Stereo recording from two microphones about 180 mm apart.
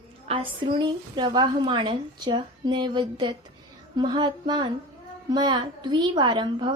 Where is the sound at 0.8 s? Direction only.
25° right (ahead or behind).